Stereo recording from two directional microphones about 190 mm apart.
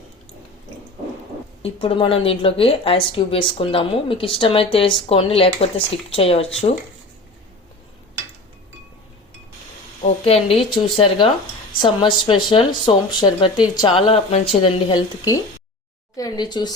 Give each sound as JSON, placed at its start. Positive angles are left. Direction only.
{"t": 1.6, "sound": "speech", "side_deg": 30}
{"t": 10.0, "sound": "a woman's voice", "side_deg": 30}